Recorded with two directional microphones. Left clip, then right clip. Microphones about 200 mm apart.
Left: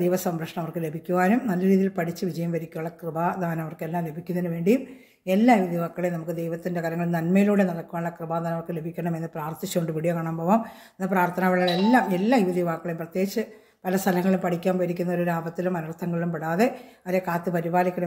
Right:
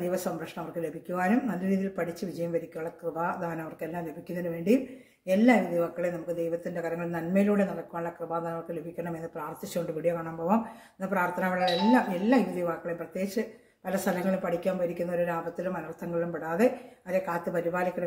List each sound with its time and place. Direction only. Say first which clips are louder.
0.7 s speech: left 7 dB; 45° left (ahead or behind)